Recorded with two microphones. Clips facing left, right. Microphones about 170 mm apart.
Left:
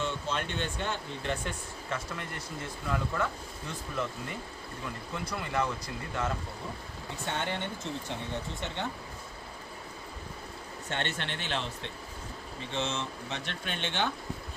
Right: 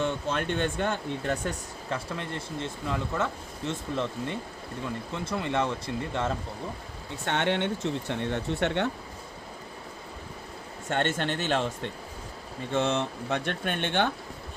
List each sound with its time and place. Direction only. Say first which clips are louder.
0.0 s speech: right 5 dB; 55° right (ahead or behind); by 6.3 s 25° right (ahead or behind)
7.3 s speech: right 8 dB; 70° right (ahead or behind)
10.8 s speech: right 8 dB; 45° right (ahead or behind)